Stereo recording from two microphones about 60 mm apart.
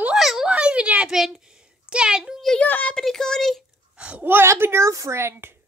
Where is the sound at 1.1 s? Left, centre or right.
Centre.